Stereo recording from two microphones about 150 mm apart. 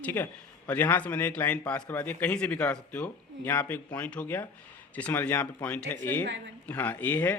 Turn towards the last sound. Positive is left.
turn(degrees=10)  # may be behind; listen again after turning